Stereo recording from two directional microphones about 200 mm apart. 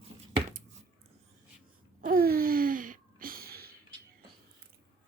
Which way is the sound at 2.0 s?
45° right (ahead or behind).